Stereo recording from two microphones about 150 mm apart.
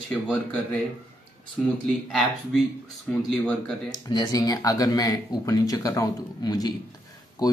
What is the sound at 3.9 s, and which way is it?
Speech, 30° left (ahead or behind).